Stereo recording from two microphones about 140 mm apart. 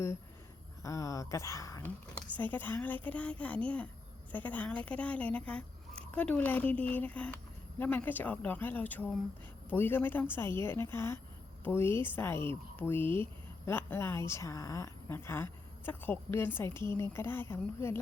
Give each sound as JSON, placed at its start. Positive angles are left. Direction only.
{"t": 0.8, "sound": "speech", "side_deg": 25}